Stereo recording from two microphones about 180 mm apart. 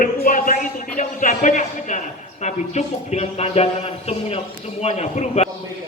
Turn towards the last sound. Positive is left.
turn(degrees=35)  # may be behind; listen again after turning